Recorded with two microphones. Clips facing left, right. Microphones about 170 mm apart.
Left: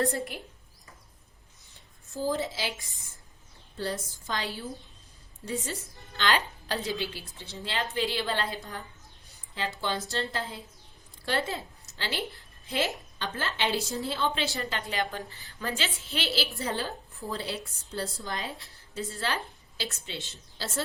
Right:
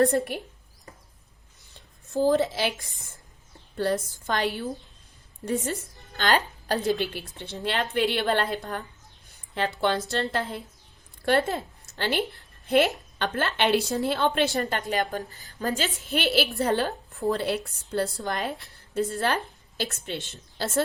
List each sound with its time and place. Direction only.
2.1 s a woman's voice: 65° right (ahead or behind)
3.8 s a woman's voice: 60° right (ahead or behind)
6.9 s a woman's voice: 60° right (ahead or behind)